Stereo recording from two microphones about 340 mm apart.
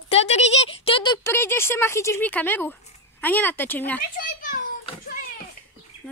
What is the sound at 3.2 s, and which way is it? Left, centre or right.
Speech, centre.